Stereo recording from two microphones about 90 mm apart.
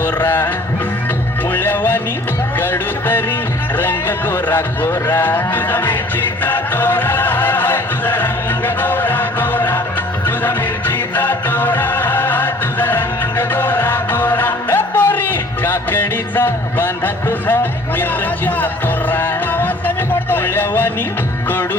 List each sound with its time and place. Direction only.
0.0 s music: 20° left (ahead or behind)
1.5 s music: 20° left (ahead or behind)
2.6 s speech: 20° left (ahead or behind)
6.4 s music: 20° left (ahead or behind)
20.3 s speech: 25° left (ahead or behind)